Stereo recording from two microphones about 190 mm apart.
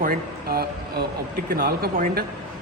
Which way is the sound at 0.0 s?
50° right (ahead or behind).